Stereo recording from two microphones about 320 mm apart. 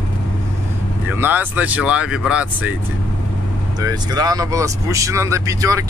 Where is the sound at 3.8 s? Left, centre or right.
Centre.